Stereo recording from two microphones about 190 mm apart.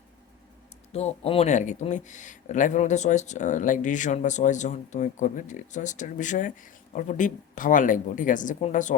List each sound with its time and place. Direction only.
0.9 s a woman's voice: 35° left (ahead or behind)